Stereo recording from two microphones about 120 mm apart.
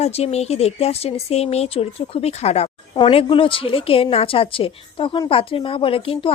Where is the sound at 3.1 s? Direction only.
45° left (ahead or behind).